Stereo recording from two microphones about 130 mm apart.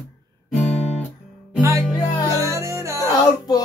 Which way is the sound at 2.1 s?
30° left (ahead or behind).